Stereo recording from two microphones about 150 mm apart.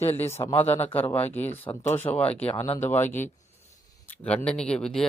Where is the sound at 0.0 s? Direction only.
20° left (ahead or behind).